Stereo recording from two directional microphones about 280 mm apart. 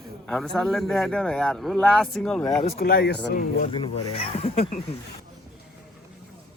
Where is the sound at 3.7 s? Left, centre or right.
Centre.